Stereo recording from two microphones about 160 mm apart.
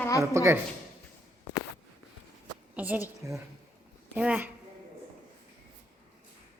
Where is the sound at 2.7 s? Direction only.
10° right (ahead or behind).